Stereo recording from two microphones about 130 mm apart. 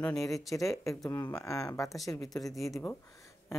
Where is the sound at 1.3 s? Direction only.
25° left (ahead or behind).